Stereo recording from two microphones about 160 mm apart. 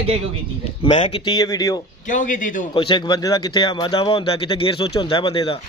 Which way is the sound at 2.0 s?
55° left (ahead or behind).